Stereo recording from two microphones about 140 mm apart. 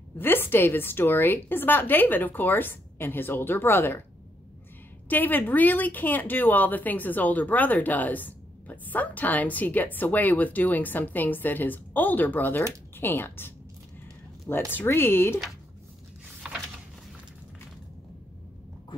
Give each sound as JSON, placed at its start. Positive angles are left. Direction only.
{"t": 0.2, "sound": "speech", "side_deg": 15}
{"t": 5.0, "sound": "speech", "side_deg": 15}
{"t": 14.7, "sound": "speech", "side_deg": 15}
{"t": 16.5, "sound": "a sound", "side_deg": -5}